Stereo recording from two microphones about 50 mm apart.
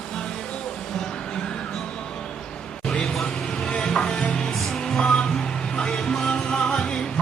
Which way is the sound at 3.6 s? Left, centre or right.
Centre.